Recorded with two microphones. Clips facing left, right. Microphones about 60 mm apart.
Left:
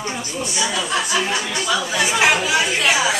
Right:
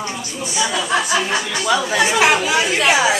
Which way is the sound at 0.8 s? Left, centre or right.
Right.